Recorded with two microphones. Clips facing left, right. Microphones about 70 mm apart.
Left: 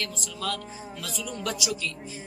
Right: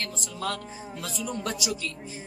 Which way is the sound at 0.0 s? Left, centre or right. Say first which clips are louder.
Even; right.